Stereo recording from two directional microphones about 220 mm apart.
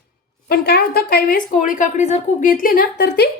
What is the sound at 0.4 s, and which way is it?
Speech, 45° left (ahead or behind).